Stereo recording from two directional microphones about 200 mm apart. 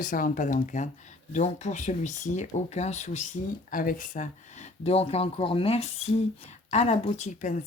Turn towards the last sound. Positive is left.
turn(degrees=40)  # may be behind; listen again after turning